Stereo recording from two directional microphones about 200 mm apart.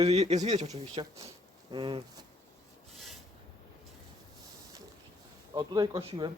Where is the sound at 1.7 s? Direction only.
25° right (ahead or behind).